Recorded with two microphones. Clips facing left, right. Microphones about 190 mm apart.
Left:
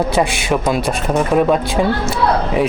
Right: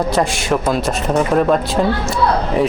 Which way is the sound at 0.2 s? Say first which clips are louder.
Left 1 dB; centre (ahead or behind).